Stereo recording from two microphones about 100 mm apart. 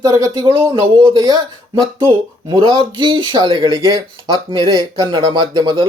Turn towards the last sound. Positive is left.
turn(degrees=-50)  # may be behind; listen again after turning